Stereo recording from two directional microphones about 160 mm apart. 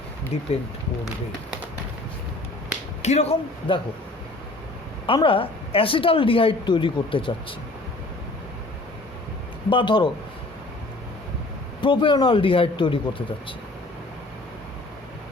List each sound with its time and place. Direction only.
3.0 s a woman's voice: 45° left (ahead or behind)
5.0 s a woman's voice: 35° left (ahead or behind)
9.6 s speech: 30° left (ahead or behind)
11.8 s a woman's voice: 30° left (ahead or behind)